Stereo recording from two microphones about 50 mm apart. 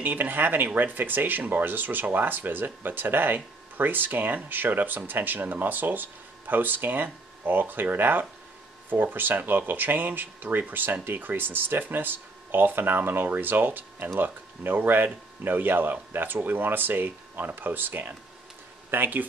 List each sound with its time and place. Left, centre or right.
0.0 s speech: right